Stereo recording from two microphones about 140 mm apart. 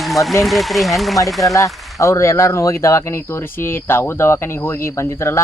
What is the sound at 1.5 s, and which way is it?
Speech, 20° left (ahead or behind).